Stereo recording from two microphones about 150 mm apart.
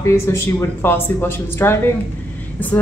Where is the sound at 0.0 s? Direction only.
15° left (ahead or behind).